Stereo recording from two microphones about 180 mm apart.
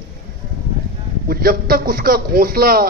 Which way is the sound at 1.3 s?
55° right (ahead or behind).